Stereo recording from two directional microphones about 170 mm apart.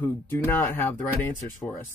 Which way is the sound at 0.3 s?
10° left (ahead or behind).